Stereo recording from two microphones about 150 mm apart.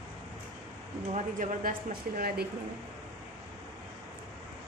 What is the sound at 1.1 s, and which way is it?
Speech, 65° right (ahead or behind).